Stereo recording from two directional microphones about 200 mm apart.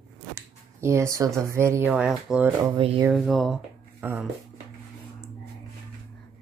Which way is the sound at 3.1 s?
Centre (ahead or behind).